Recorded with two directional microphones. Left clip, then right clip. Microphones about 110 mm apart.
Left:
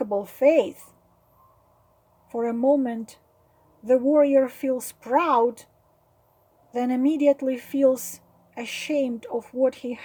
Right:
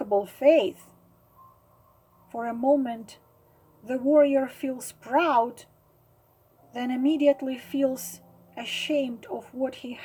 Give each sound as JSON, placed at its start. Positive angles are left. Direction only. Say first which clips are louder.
{"t": 0.0, "sound": "speech", "louder": "left 1 dB", "side_deg": 70}
{"t": 2.3, "sound": "speech", "louder": "left 2 dB", "side_deg": 65}
{"t": 6.7, "sound": "speech", "louder": "left 3 dB", "side_deg": 85}